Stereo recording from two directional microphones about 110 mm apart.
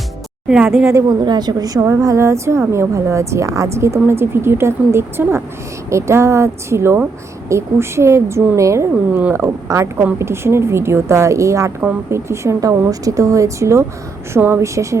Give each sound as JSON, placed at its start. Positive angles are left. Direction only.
{"t": 0.4, "sound": "speech", "side_deg": -5}
{"t": 1.2, "sound": "a woman's voice", "side_deg": -40}